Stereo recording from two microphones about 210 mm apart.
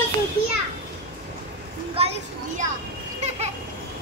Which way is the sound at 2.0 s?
30° right (ahead or behind).